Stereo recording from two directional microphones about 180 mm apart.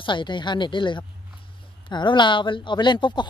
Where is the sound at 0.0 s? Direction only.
25° left (ahead or behind).